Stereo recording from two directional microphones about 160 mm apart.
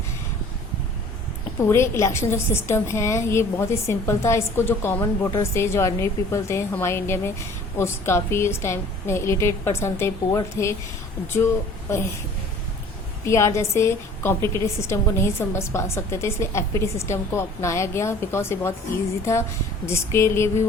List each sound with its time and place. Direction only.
1.6 s a woman's voice: 15° left (ahead or behind)
13.2 s a woman's voice: 20° left (ahead or behind)